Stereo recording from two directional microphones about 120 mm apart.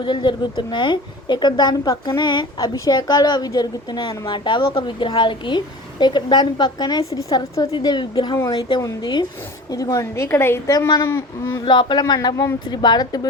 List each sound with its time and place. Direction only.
0.0 s a woman's voice: 40° left (ahead or behind); by 10.6 s 20° left (ahead or behind)
10.7 s a woman's voice: 35° left (ahead or behind)
11.0 s a woman's voice: 20° left (ahead or behind)
11.6 s a woman's voice: 40° left (ahead or behind)